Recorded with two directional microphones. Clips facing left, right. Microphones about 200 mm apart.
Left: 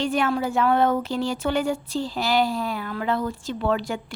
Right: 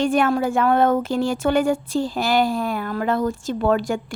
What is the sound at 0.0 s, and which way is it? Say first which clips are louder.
Speech: right 4 dB; 50° right (ahead or behind).